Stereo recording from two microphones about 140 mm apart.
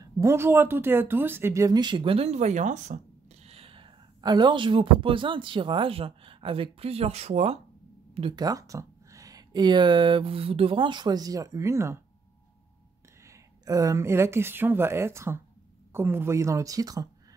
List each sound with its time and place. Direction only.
0.0 s speech: 20° right (ahead or behind); by 7.5 s 50° right (ahead or behind)
8.1 s a sound: 40° right (ahead or behind)
8.4 s speech: 25° right (ahead or behind)
13.3 s speech: 25° right (ahead or behind)